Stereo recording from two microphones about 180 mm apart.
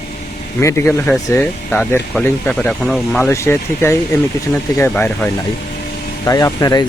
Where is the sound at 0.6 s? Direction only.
15° left (ahead or behind).